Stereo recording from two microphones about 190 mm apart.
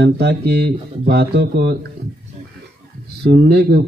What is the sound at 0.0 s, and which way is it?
Speech, 60° right (ahead or behind).